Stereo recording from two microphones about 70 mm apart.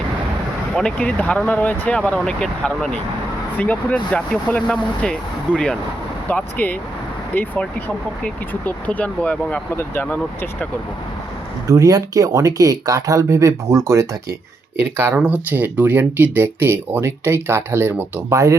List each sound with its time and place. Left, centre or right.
0.8 s speech: centre
1.5 s speech: left
2.2 s speech: centre
9.7 s speech: left
11.7 s speech: right
13.3 s speech: right
15.1 s speech: right
18.3 s speech: right